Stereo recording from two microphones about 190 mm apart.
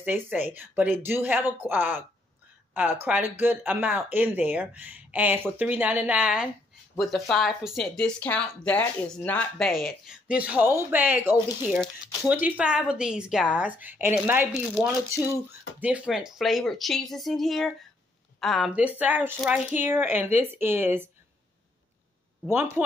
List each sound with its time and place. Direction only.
0.0 s speech: 10° right (ahead or behind)
15.8 s speech: 5° right (ahead or behind)